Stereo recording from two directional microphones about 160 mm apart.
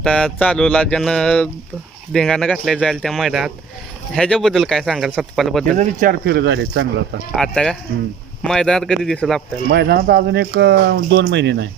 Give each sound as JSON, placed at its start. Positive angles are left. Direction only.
{"t": 0.0, "sound": "speech", "side_deg": 5}
{"t": 5.7, "sound": "speech", "side_deg": -55}
{"t": 6.2, "sound": "speech", "side_deg": -90}
{"t": 7.3, "sound": "speech", "side_deg": 5}
{"t": 9.7, "sound": "speech", "side_deg": -80}